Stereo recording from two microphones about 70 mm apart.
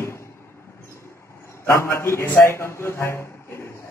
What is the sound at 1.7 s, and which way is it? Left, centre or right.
A man's voice, left.